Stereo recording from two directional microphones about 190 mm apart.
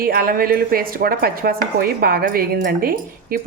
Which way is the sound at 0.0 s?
50° right (ahead or behind).